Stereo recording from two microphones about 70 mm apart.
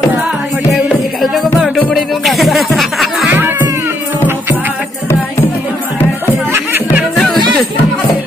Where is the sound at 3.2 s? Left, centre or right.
Right.